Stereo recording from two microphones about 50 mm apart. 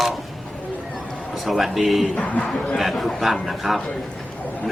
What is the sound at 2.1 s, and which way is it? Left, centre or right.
Speech, left.